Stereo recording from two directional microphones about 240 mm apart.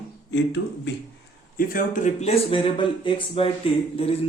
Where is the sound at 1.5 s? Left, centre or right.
Left.